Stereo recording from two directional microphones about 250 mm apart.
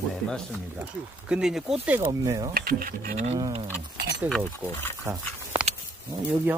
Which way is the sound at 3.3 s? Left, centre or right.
Centre.